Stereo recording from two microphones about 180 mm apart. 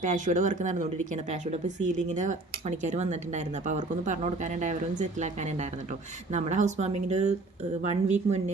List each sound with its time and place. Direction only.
0.0 s speech: 45° right (ahead or behind)